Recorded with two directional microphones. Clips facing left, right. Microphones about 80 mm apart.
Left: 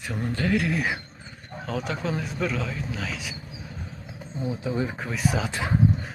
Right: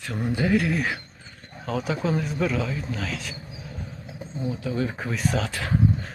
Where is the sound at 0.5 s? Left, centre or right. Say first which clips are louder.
Right 2 dB; centre.